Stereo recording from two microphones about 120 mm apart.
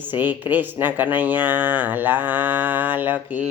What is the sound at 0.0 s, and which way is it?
Music, 15° right (ahead or behind).